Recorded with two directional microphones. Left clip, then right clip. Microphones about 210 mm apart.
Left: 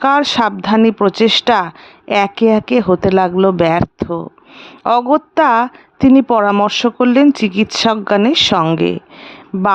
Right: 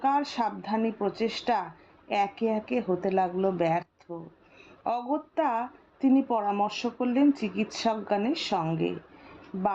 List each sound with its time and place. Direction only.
0.0 s a woman's voice: 45° left (ahead or behind)